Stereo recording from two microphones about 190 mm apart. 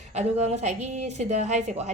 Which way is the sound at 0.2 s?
35° right (ahead or behind).